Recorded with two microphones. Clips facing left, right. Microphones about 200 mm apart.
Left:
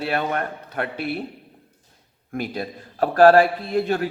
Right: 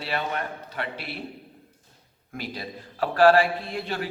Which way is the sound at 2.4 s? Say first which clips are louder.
Left 6 dB; 50° left (ahead or behind).